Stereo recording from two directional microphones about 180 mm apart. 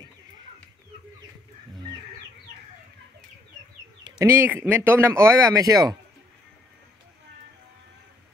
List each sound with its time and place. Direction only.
4.0 s speech: 15° right (ahead or behind)